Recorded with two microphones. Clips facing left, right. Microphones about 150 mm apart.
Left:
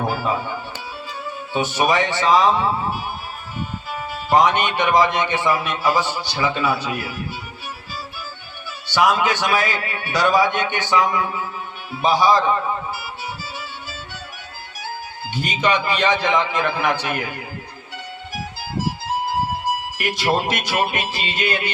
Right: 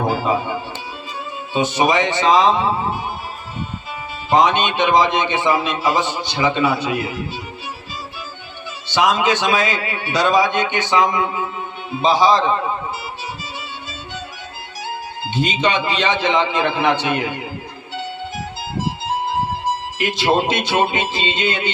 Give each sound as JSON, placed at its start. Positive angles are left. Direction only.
{"t": 0.1, "sound": "speech", "side_deg": -20}
{"t": 1.5, "sound": "a man's voice", "side_deg": -20}
{"t": 4.3, "sound": "a man's voice", "side_deg": -20}
{"t": 8.9, "sound": "a man's voice", "side_deg": -20}
{"t": 15.2, "sound": "a man's voice", "side_deg": -20}
{"t": 18.6, "sound": "music", "side_deg": -20}